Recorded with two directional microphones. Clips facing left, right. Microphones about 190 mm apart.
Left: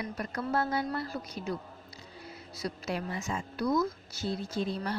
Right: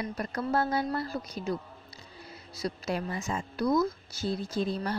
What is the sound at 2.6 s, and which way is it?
A woman's voice, 40° right (ahead or behind).